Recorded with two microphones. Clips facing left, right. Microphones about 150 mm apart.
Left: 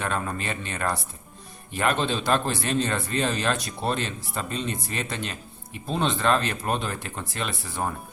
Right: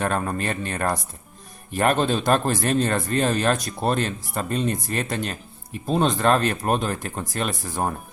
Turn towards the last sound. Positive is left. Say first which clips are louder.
# right 4 dB
turn(degrees=-45)  # may be behind; listen again after turning